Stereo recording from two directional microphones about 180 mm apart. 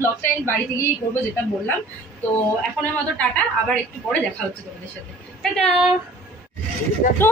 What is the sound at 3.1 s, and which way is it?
Speech, 10° left (ahead or behind).